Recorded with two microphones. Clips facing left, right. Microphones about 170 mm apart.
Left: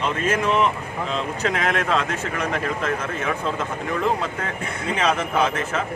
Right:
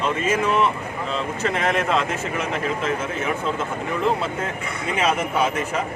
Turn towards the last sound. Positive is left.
turn(degrees=-10)  # may be behind; listen again after turning